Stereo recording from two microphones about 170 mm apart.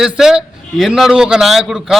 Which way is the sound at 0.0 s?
5° right (ahead or behind).